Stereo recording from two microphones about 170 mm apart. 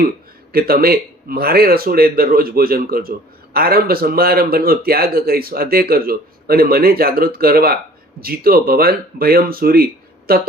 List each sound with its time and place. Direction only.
0.5 s speech: 60° right (ahead or behind)